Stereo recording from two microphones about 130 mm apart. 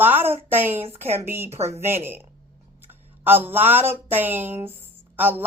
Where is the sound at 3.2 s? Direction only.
15° right (ahead or behind).